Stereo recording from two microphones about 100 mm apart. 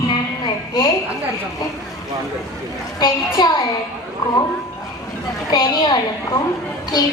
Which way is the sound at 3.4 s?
45° left (ahead or behind).